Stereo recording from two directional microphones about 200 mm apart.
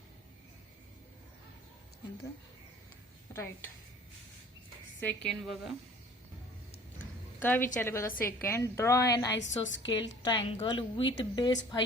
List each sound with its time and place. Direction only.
3.3 s a woman's voice: 10° left (ahead or behind)
5.0 s a woman's voice: centre (ahead or behind)
7.4 s a woman's voice: 10° left (ahead or behind)
9.3 s a woman's voice: 65° left (ahead or behind)
10.2 s a woman's voice: 20° left (ahead or behind)